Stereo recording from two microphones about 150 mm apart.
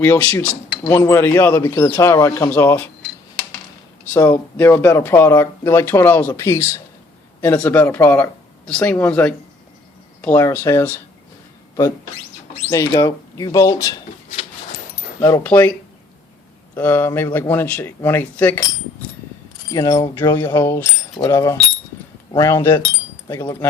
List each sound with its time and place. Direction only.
0.0 s speech: 15° left (ahead or behind)
4.1 s speech: 15° left (ahead or behind)
12.7 s speech: 20° left (ahead or behind)
15.4 s speech: 10° left (ahead or behind)
16.7 s speech: 15° left (ahead or behind)
19.7 s speech: 20° left (ahead or behind)